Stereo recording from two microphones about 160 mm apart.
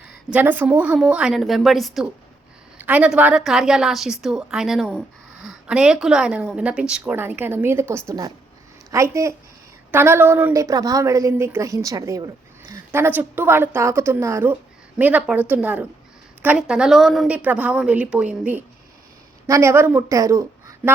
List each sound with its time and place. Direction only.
0.3 s a woman's voice: 10° right (ahead or behind)